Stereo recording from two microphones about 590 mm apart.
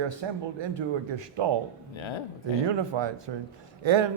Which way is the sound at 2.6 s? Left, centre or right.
Right.